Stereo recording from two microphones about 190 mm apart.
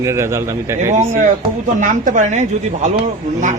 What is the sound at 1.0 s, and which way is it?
A woman's voice, 40° right (ahead or behind).